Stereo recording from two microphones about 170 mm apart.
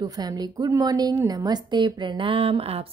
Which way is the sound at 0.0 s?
25° right (ahead or behind).